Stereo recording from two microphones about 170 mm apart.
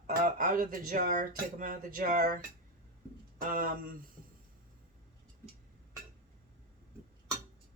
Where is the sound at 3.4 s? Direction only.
55° right (ahead or behind).